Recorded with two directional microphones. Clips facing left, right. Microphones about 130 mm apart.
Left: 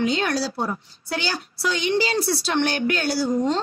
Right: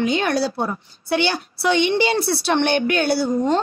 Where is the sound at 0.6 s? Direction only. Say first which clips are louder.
Right 2 dB; 25° right (ahead or behind).